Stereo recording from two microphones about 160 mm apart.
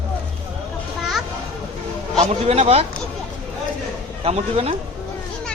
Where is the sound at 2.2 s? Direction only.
40° right (ahead or behind).